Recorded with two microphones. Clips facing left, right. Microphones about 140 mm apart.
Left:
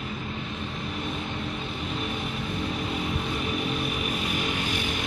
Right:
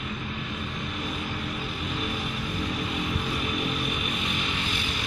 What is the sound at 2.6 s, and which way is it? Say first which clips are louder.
Vehicle: even; 30° left (ahead or behind).